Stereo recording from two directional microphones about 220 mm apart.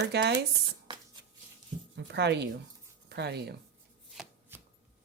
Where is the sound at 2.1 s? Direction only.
50° right (ahead or behind).